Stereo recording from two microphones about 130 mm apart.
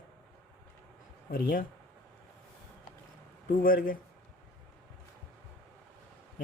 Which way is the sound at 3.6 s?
90° left.